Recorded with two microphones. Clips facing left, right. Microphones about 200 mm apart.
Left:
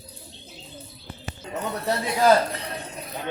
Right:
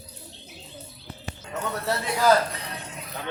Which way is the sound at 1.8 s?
20° left (ahead or behind).